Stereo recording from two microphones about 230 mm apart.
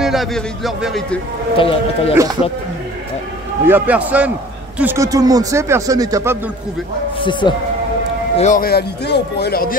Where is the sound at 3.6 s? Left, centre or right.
Centre.